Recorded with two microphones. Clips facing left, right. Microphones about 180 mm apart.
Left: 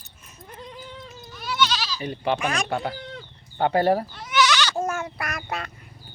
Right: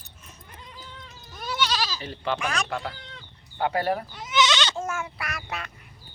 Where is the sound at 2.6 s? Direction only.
35° left (ahead or behind).